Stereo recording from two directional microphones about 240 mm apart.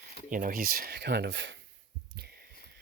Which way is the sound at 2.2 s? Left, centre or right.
Right.